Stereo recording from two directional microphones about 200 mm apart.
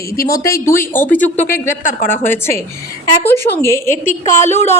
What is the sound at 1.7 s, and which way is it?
Speech, 40° left (ahead or behind).